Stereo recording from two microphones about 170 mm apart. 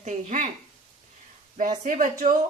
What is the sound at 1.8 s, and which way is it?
Speech, 50° right (ahead or behind).